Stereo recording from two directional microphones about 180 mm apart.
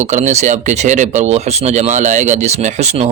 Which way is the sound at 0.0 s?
40° right (ahead or behind).